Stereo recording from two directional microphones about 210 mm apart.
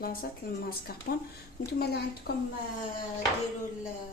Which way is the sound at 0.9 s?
45° left (ahead or behind).